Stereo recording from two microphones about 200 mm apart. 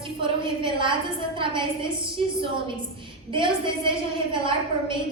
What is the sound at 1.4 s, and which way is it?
A woman's voice, 25° right (ahead or behind).